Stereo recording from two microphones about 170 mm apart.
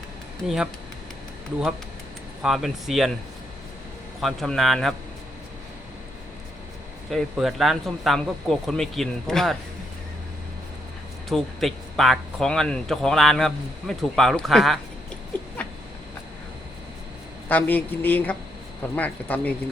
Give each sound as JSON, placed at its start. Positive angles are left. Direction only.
{"t": 0.4, "sound": "speech", "side_deg": -5}
{"t": 2.4, "sound": "speech", "side_deg": 0}
{"t": 4.2, "sound": "speech", "side_deg": 0}
{"t": 7.1, "sound": "speech", "side_deg": 0}
{"t": 11.3, "sound": "speech", "side_deg": 0}
{"t": 17.5, "sound": "speech", "side_deg": 10}